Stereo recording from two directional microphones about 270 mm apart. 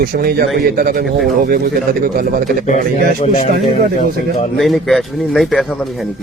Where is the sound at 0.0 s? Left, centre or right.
Right.